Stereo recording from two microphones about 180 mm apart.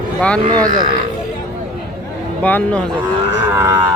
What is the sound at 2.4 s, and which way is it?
Speech, 10° left (ahead or behind).